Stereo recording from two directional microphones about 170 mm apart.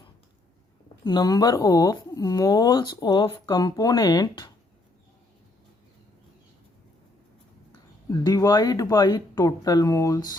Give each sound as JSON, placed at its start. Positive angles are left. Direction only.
{"t": 1.0, "sound": "speech", "side_deg": 25}
{"t": 8.2, "sound": "speech", "side_deg": 20}